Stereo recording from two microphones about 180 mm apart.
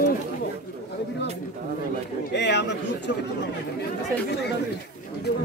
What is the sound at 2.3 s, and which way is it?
Speech, 75° left (ahead or behind).